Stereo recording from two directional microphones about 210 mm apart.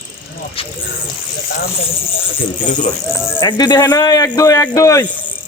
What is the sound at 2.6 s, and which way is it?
Speech, 35° left (ahead or behind).